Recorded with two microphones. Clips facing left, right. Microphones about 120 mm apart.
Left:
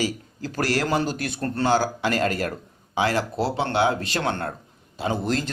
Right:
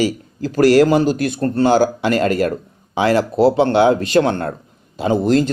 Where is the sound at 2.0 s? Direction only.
60° right (ahead or behind).